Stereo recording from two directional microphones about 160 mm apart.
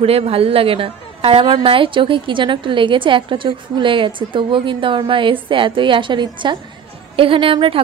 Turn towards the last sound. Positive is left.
turn(degrees=-35)  # may be behind; listen again after turning